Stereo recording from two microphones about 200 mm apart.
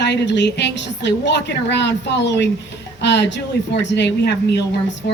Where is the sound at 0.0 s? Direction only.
60° left (ahead or behind).